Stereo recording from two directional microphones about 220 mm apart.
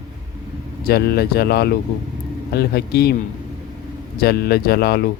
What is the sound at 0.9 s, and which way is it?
Speech, 45° left (ahead or behind).